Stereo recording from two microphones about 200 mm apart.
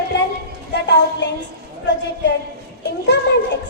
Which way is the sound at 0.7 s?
60° left (ahead or behind).